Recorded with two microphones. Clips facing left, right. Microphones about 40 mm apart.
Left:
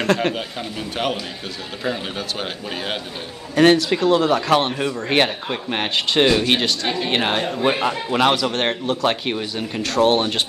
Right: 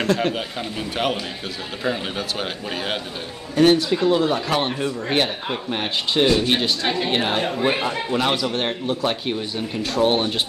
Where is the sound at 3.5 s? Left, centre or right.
Left.